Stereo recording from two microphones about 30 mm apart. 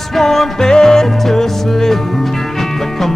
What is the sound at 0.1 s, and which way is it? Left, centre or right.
Music, centre.